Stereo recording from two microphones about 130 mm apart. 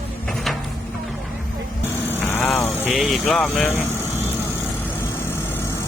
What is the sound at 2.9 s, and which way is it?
Speech, centre (ahead or behind).